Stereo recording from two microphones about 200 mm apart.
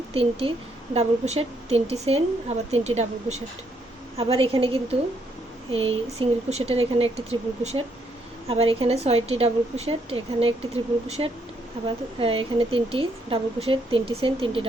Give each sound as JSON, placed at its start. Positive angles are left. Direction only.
{"t": 0.1, "sound": "a woman's voice", "side_deg": -30}